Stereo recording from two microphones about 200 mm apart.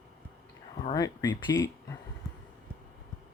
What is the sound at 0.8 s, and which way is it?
Speech, 20° left (ahead or behind).